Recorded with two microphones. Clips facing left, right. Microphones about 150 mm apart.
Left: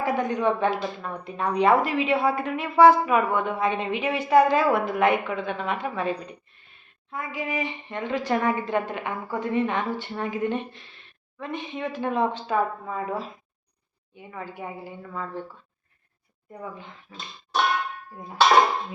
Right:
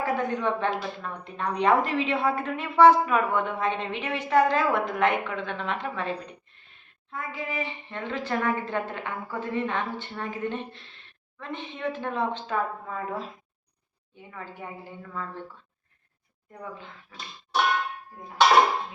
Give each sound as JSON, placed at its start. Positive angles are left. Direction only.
{"t": 0.0, "sound": "a woman's voice", "side_deg": 15}
{"t": 7.1, "sound": "a woman's voice", "side_deg": 10}
{"t": 16.5, "sound": "a woman's voice", "side_deg": 15}
{"t": 17.1, "sound": "music", "side_deg": 20}